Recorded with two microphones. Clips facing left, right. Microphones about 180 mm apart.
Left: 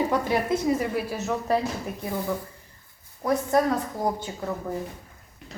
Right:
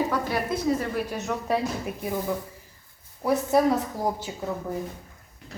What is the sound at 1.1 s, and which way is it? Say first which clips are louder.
Speech: left 2 dB; centre (ahead or behind).